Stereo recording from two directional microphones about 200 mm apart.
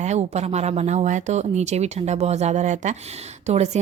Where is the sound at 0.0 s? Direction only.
35° right (ahead or behind).